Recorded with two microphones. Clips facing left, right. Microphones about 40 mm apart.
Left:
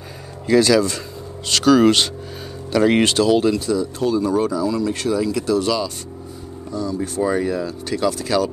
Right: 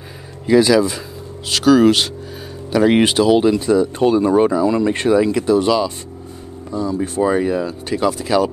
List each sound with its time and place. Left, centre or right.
0.5 s speech: centre
3.6 s speech: right; by 8.5 s centre